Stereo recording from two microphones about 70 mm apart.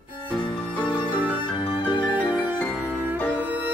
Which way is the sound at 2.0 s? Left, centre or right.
Right.